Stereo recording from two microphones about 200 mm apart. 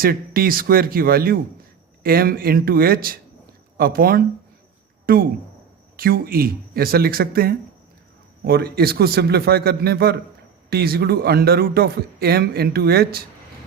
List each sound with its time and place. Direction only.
0.0 s speech: 45° right (ahead or behind)